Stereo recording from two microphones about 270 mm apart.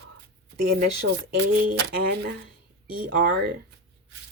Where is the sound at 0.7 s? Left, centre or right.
Right.